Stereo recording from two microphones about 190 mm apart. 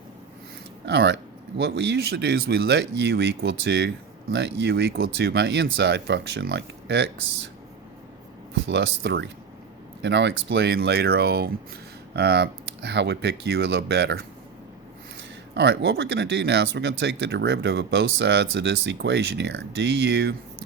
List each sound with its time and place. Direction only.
0.9 s speech: 65° right (ahead or behind)
8.5 s speech: 65° right (ahead or behind)
15.5 s speech: 60° right (ahead or behind)